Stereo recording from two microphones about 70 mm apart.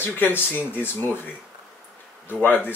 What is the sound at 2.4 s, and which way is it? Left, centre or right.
Speech, left.